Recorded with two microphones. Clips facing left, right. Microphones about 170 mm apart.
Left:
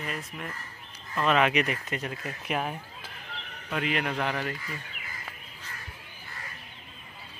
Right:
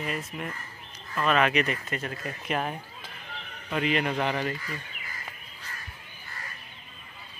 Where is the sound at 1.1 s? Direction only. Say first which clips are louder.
Even; 15° left (ahead or behind); by 4.6 s centre (ahead or behind).